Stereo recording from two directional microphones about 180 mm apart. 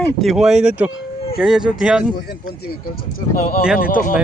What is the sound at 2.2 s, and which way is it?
Speech, 60° left (ahead or behind).